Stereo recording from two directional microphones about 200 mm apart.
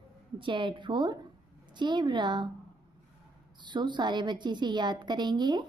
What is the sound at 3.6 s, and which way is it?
A woman's voice, 20° right (ahead or behind).